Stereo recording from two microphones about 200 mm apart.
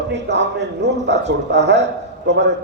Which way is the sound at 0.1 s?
60° right (ahead or behind).